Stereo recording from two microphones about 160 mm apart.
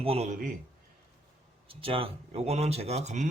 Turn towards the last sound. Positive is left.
turn(degrees=-45)  # may be behind; listen again after turning